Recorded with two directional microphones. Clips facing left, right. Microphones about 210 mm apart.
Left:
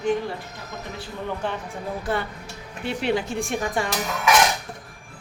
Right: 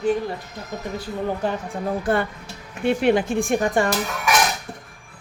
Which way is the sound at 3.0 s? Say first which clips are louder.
Right 3 dB; 55° right (ahead or behind).